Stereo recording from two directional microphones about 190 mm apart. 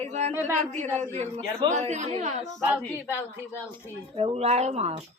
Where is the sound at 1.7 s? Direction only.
40° right (ahead or behind).